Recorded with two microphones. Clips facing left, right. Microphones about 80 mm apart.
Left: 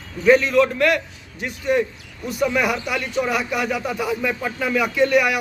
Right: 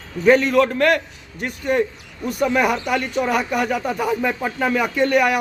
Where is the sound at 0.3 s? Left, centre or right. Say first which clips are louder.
Even; right.